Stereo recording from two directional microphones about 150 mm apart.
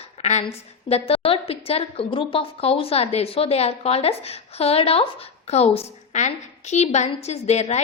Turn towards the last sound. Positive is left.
turn(degrees=45)  # may be behind; listen again after turning